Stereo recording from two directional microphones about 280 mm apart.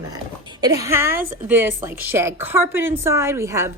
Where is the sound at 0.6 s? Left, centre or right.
Centre.